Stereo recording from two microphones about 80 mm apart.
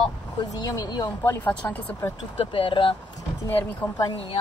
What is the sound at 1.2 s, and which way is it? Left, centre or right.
Speech, left.